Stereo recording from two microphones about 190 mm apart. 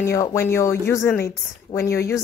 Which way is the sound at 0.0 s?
15° left (ahead or behind).